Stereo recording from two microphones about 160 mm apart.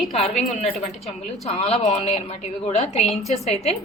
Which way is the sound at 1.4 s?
40° left (ahead or behind).